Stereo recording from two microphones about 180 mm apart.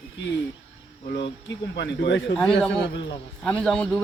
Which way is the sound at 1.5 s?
80° left.